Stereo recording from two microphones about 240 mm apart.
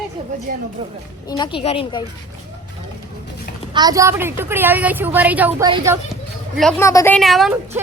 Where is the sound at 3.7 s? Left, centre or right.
Centre.